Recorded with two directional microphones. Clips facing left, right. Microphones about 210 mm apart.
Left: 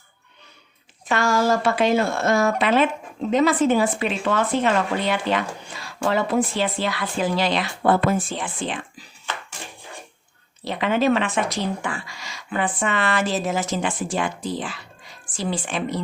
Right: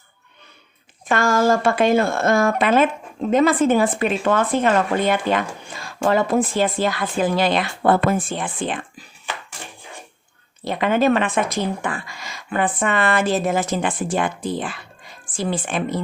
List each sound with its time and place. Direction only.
1.0 s speech: 50° right (ahead or behind)
10.6 s speech: 50° right (ahead or behind)